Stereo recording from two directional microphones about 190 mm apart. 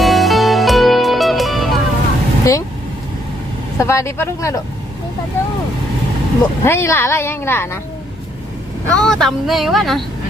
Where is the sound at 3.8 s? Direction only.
15° left (ahead or behind).